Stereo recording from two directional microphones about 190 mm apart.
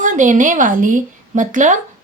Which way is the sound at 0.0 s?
40° right (ahead or behind).